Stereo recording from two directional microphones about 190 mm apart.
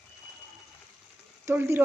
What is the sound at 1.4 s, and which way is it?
Speech, 10° right (ahead or behind).